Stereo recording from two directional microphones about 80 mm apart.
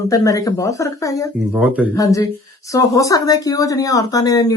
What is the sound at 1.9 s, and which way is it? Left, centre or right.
Speech, left.